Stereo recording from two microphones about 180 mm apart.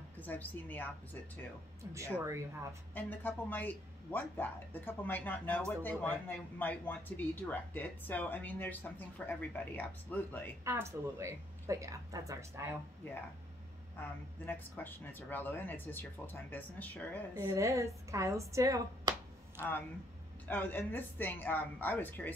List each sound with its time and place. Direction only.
0.2 s speech: 10° left (ahead or behind)
2.1 s speech: 15° right (ahead or behind)
2.9 s speech: 10° left (ahead or behind)
10.6 s speech: 15° right (ahead or behind)
13.9 s speech: 10° left (ahead or behind)
17.5 s speech: 15° right (ahead or behind)
20.4 s speech: 10° left (ahead or behind)